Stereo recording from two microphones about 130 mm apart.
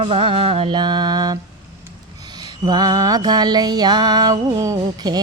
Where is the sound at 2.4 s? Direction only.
30° right (ahead or behind).